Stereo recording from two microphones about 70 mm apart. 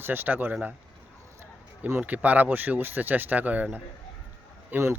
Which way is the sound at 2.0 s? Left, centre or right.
Right.